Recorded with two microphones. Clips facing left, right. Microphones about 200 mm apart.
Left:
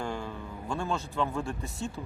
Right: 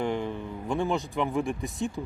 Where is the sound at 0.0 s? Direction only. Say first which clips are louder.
Right 6 dB; 20° right (ahead or behind).